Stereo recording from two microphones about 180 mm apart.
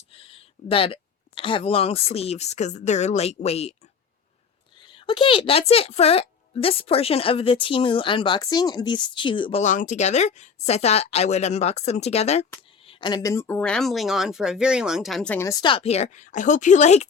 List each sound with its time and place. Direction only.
0.1 s a sound: 30° left (ahead or behind)
1.4 s speech: 30° left (ahead or behind)
4.8 s a woman's voice: 30° left (ahead or behind); by 15.5 s 10° left (ahead or behind)
15.6 s speech: 30° left (ahead or behind)